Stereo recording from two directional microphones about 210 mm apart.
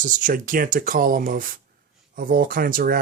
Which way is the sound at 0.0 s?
40° right (ahead or behind).